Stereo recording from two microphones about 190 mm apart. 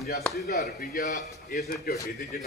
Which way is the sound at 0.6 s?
45° left (ahead or behind).